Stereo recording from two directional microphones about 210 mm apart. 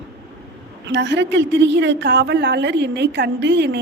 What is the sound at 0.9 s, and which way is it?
A woman's voice, 55° right (ahead or behind).